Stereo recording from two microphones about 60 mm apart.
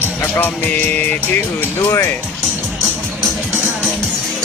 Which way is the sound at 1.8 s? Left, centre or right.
Left.